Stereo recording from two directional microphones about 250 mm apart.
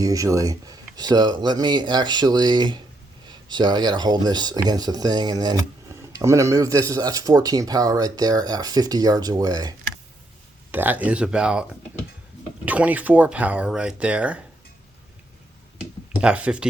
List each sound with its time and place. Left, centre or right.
0.0 s speech: centre
12.6 s speech: centre
16.2 s speech: centre